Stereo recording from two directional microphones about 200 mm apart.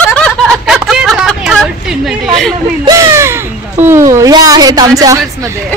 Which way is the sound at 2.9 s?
15° right (ahead or behind).